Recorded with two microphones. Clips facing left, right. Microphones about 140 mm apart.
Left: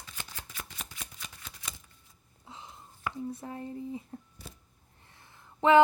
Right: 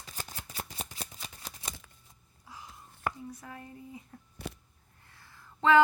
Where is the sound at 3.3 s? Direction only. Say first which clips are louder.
Left 7 dB; 25° left (ahead or behind).